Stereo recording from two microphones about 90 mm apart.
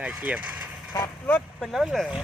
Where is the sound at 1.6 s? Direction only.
Centre (ahead or behind).